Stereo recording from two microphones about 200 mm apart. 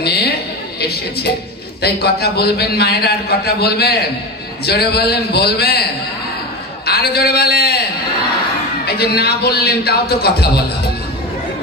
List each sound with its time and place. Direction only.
0.0 s a sound: 55° left (ahead or behind)
0.7 s a man's voice: 55° left (ahead or behind)
6.9 s a man's voice: 50° left (ahead or behind)
8.8 s a man's voice: 50° left (ahead or behind)